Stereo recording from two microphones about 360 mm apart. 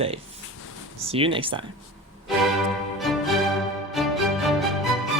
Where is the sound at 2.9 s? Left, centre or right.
Centre.